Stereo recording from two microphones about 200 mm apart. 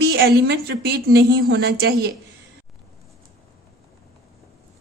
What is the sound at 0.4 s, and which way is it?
A woman's voice, 55° right (ahead or behind).